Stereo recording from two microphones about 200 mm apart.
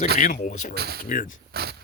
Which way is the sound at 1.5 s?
55° right (ahead or behind).